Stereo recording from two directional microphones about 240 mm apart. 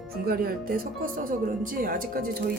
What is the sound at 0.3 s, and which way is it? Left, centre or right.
Speech, right.